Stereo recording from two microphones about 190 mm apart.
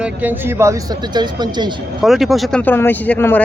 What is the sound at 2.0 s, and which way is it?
Speech, centre (ahead or behind).